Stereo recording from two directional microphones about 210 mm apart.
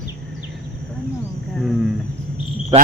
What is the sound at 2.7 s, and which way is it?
Cricket, 25° right (ahead or behind).